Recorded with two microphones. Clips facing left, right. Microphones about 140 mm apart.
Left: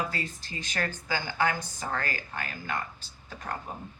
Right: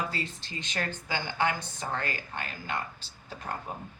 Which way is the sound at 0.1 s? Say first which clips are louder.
Even; 30° right (ahead or behind).